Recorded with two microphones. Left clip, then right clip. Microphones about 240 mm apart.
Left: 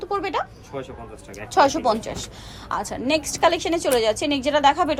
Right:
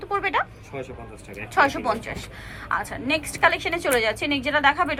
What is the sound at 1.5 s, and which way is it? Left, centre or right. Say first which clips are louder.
A woman's voice: left 3 dB; centre.